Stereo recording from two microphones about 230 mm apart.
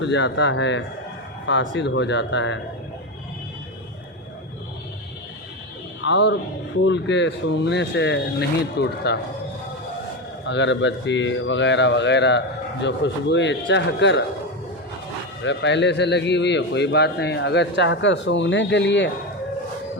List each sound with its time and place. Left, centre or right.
0.0 s speech: left
6.0 s speech: left
10.4 s speech: left
15.4 s speech: left